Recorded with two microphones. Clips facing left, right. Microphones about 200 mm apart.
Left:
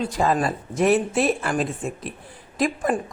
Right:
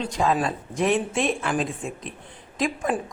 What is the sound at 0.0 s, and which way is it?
A woman's voice, 5° left (ahead or behind).